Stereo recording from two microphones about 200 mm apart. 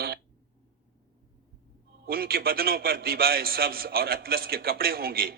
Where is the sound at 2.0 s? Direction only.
45° right (ahead or behind).